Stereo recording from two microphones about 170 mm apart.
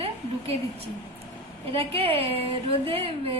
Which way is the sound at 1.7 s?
35° right (ahead or behind).